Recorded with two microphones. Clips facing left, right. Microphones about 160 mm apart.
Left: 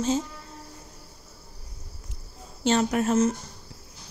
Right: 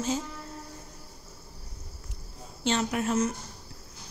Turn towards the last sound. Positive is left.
turn(degrees=45)  # may be behind; listen again after turning